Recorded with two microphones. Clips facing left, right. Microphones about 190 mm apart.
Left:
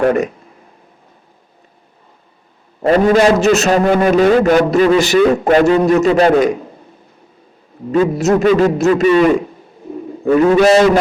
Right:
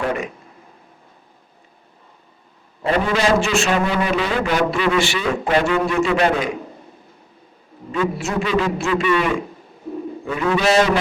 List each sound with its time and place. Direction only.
0.0 s a man's voice: 45° left (ahead or behind)
2.8 s a man's voice: 40° left (ahead or behind)
7.9 s a man's voice: 40° left (ahead or behind)